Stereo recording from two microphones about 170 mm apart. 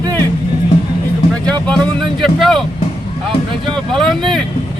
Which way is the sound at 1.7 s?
5° left (ahead or behind).